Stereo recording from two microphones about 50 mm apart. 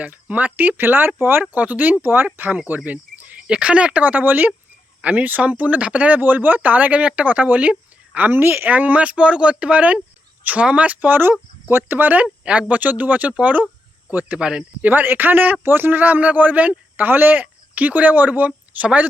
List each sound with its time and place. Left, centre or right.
0.0 s speech: right
3.4 s speech: right
8.2 s speech: right
11.1 s speech: right
14.3 s speech: centre
14.8 s speech: right